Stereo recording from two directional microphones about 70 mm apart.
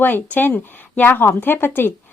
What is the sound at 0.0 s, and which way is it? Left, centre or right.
Speech, left.